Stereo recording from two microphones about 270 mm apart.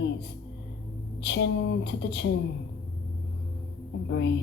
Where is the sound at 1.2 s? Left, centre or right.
Left.